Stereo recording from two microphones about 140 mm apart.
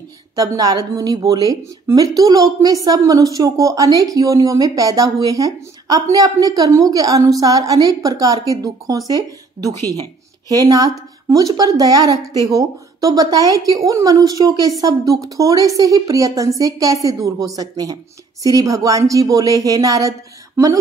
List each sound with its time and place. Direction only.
0.4 s a woman's voice: 25° right (ahead or behind)